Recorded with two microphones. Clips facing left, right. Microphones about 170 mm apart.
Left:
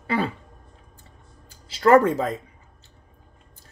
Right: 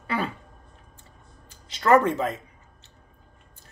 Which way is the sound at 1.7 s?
30° left (ahead or behind).